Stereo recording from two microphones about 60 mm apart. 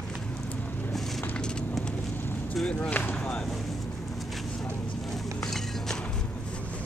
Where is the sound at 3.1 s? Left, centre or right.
Centre.